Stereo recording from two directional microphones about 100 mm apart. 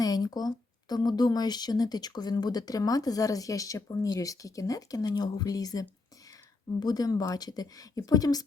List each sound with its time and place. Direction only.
0.0 s speech: 40° left (ahead or behind)